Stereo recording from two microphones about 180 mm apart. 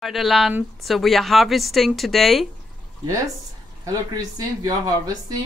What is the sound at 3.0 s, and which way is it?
Speech, 20° right (ahead or behind).